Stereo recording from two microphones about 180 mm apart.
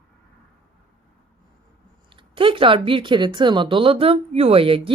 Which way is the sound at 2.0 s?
30° right (ahead or behind).